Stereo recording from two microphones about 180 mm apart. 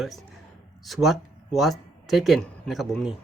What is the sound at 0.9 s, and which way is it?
Speech, centre (ahead or behind).